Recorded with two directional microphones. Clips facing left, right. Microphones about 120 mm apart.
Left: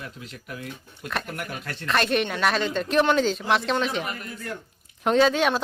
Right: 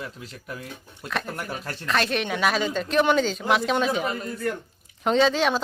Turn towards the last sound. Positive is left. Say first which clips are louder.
# left 1 dB
turn(degrees=0)  # may be behind; listen again after turning